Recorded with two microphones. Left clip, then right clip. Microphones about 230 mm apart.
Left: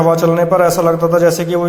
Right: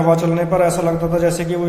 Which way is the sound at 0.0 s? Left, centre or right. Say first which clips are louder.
Left 4 dB; left.